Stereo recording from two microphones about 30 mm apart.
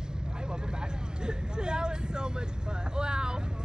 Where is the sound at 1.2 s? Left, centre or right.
Right.